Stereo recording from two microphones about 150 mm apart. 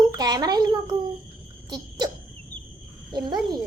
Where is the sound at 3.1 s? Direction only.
30° right (ahead or behind).